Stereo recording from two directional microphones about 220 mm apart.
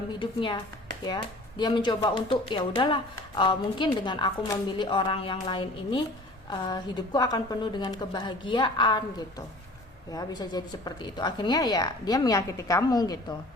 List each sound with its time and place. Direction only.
0.1 s speech: 20° left (ahead or behind)